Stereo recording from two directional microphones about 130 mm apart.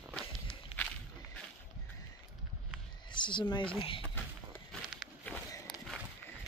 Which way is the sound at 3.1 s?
35° left (ahead or behind).